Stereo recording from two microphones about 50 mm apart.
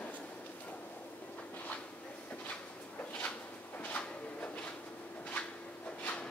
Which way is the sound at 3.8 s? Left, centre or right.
Left.